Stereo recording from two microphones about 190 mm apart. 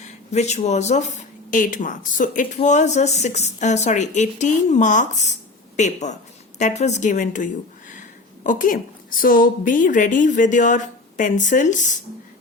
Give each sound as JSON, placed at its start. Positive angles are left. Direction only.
{"t": 0.3, "sound": "a woman's voice", "side_deg": 35}